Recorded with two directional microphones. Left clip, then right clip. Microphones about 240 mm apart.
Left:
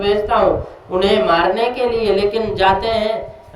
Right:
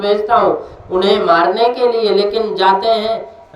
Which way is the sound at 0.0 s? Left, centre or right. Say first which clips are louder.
Right 2 dB; centre.